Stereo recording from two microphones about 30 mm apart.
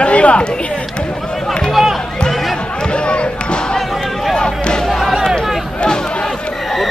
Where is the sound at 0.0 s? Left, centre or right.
Left.